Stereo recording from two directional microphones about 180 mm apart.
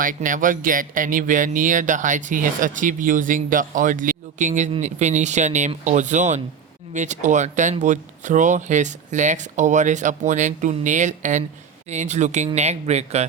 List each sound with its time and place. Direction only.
0.0 s speech: 45° right (ahead or behind)